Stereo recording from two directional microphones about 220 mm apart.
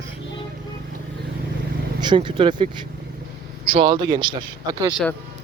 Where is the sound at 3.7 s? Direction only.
20° right (ahead or behind).